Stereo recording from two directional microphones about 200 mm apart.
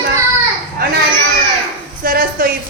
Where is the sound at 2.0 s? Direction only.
45° right (ahead or behind).